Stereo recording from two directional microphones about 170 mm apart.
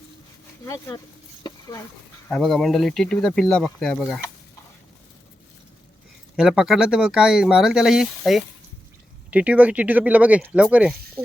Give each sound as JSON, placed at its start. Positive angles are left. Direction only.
{"t": 0.6, "sound": "speech", "side_deg": 20}
{"t": 1.5, "sound": "a sound", "side_deg": 25}
{"t": 2.3, "sound": "speech", "side_deg": 0}
{"t": 6.3, "sound": "speech", "side_deg": -5}